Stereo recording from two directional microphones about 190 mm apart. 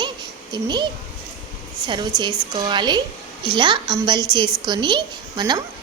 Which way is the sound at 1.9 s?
25° right (ahead or behind).